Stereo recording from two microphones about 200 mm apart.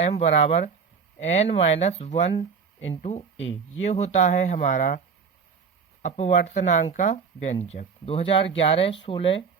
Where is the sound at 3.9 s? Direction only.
35° left (ahead or behind).